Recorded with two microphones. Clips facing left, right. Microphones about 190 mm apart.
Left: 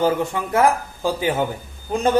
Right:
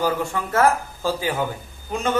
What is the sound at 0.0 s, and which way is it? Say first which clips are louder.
Speech: left 3 dB; 20° left (ahead or behind).